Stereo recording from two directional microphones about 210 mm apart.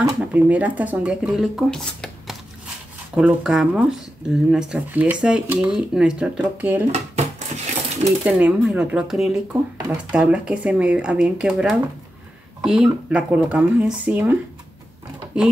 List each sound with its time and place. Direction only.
0.0 s speech: 5° right (ahead or behind)
6.9 s dishes: 30° right (ahead or behind)
8.0 s speech: 5° right (ahead or behind)